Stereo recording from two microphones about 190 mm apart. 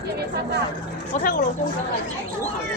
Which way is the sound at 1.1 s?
40° left (ahead or behind).